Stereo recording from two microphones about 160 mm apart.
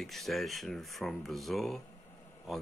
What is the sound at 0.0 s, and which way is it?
Speech, centre (ahead or behind).